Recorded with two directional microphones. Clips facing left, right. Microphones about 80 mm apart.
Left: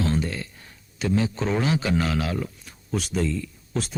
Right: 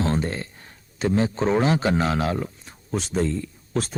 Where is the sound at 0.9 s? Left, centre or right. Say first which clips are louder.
Right 2 dB; right.